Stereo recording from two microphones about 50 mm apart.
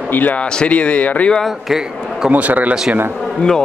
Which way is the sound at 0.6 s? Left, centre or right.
Left.